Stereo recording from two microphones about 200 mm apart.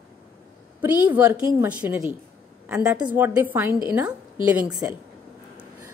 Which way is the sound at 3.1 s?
10° right (ahead or behind).